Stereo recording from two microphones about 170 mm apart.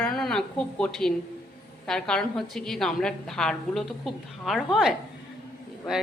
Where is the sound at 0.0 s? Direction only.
Centre (ahead or behind).